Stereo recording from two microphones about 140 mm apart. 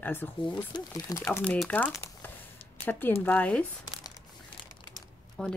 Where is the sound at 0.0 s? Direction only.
15° left (ahead or behind).